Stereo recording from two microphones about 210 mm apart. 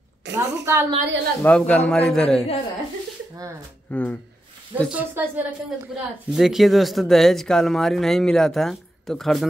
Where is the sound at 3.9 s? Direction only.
5° left (ahead or behind).